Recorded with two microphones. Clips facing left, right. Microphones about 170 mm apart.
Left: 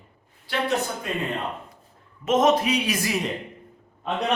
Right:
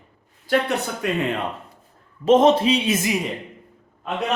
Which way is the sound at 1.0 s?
75° right (ahead or behind).